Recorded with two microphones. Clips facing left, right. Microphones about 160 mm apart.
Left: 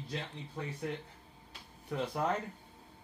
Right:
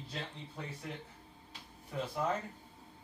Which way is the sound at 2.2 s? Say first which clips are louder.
Left 1 dB; 60° left (ahead or behind).